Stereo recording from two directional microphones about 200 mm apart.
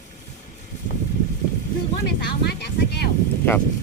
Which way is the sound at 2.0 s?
55° left (ahead or behind).